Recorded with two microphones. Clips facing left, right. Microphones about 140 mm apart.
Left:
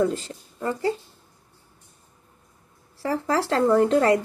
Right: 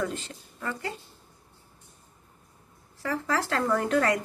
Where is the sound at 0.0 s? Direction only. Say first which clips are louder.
Left 8 dB; 35° left (ahead or behind).